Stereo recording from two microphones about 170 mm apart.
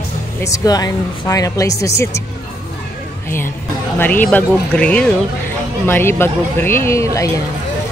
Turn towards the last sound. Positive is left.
turn(degrees=20)  # may be behind; listen again after turning